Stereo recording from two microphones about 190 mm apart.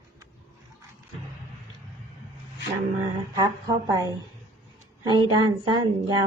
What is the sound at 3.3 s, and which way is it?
Speech, 20° right (ahead or behind).